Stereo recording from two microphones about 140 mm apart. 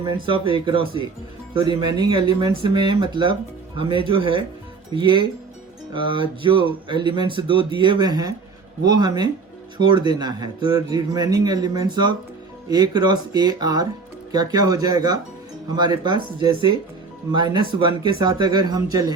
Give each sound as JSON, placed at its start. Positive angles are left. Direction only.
{"t": 0.0, "sound": "speech", "side_deg": -35}